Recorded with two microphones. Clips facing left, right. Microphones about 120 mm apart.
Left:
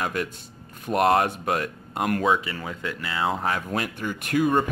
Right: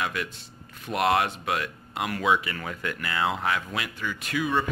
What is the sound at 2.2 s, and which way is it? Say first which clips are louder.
Speech: right 1 dB; 35° left (ahead or behind).